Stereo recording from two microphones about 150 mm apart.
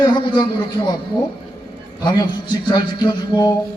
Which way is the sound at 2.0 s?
30° left (ahead or behind).